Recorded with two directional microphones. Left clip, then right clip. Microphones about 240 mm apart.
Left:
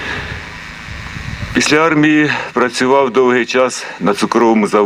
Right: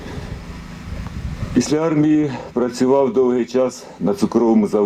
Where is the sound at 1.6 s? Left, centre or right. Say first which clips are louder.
Left 7 dB; centre.